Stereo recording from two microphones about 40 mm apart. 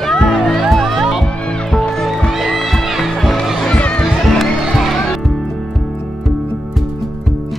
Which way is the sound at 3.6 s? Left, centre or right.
Left.